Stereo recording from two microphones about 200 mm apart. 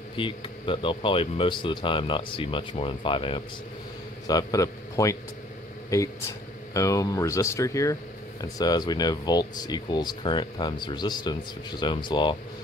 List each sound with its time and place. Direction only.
0.1 s a man's voice: 25° left (ahead or behind)